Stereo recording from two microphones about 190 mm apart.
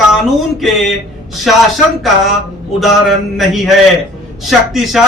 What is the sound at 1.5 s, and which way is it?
Speech, centre (ahead or behind).